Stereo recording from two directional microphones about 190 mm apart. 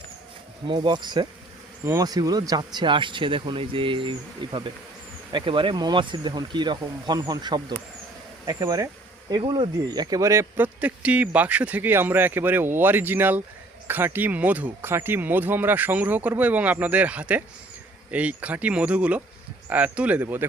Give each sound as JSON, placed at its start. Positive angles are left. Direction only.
{"t": 0.7, "sound": "speech", "side_deg": -25}